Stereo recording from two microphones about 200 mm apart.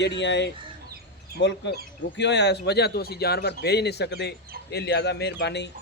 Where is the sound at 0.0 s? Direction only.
60° left (ahead or behind).